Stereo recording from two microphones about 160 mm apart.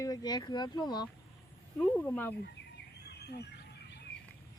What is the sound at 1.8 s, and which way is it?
Speech, 10° left (ahead or behind).